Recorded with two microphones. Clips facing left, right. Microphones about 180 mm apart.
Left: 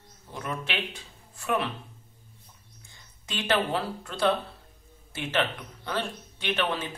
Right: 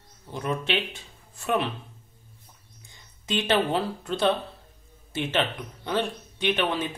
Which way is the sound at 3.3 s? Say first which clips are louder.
Right 4 dB; 20° right (ahead or behind).